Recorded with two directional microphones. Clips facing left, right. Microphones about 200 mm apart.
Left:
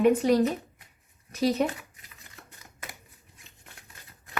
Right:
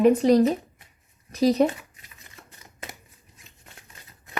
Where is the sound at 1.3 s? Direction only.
35° right (ahead or behind).